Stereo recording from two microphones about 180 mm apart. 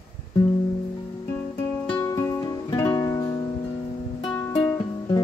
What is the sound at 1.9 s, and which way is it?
Music, 15° left (ahead or behind).